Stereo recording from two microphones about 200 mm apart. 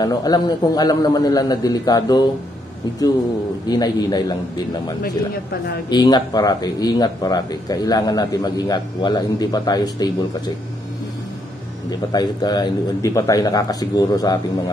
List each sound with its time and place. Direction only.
0.0 s speech: 20° left (ahead or behind)
3.6 s speech: 20° left (ahead or behind)
5.9 s speech: 20° left (ahead or behind)
11.9 s speech: 20° left (ahead or behind)